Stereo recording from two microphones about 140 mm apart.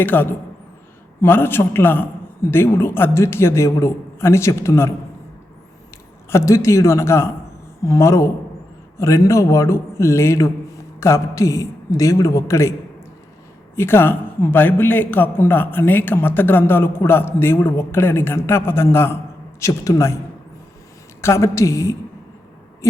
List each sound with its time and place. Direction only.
0.0 s a man's voice: 15° left (ahead or behind)
6.3 s a man's voice: 20° left (ahead or behind)
13.7 s a man's voice: 15° left (ahead or behind)
21.2 s a man's voice: 20° left (ahead or behind)